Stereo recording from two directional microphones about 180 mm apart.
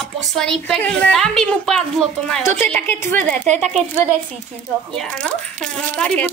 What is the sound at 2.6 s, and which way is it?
Speech, 10° left (ahead or behind).